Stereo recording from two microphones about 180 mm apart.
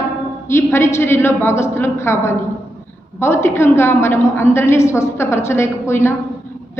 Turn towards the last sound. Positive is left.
turn(degrees=15)  # may be behind; listen again after turning